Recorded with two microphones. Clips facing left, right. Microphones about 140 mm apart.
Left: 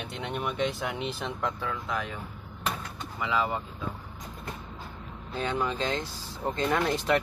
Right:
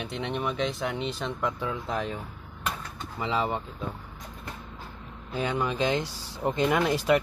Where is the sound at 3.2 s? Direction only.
25° right (ahead or behind).